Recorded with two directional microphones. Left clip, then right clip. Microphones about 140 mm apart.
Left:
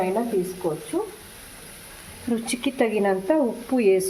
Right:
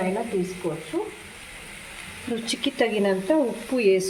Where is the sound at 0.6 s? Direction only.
25° left (ahead or behind).